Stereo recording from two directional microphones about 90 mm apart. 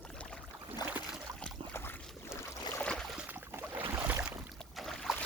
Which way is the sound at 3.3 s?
25° right (ahead or behind).